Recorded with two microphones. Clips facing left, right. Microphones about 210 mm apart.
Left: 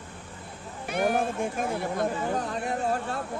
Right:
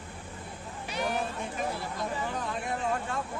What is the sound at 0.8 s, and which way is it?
Chatter, 55° left (ahead or behind).